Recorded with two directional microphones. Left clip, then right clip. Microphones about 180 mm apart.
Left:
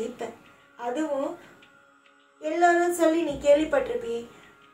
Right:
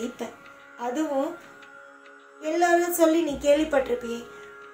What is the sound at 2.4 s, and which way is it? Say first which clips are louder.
Speech: even; 35° right (ahead or behind).